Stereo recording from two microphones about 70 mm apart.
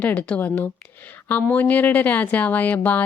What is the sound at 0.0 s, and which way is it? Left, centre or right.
A woman's voice, left.